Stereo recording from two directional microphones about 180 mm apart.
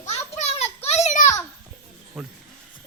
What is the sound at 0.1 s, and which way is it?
Children playing, 35° left (ahead or behind).